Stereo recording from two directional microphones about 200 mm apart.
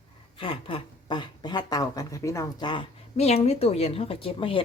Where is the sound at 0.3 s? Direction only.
25° left (ahead or behind).